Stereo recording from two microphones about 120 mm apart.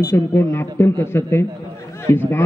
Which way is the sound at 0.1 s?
20° left (ahead or behind).